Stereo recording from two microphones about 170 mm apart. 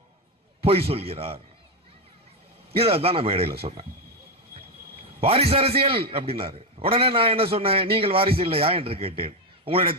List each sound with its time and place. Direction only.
0.6 s a man's voice: 35° right (ahead or behind)
2.7 s a man's voice: 35° right (ahead or behind)
5.2 s a man's voice: 35° right (ahead or behind)